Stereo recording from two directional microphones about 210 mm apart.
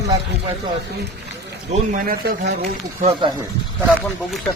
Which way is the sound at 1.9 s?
45° right (ahead or behind).